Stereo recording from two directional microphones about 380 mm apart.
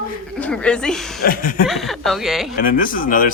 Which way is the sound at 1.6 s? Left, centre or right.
Centre.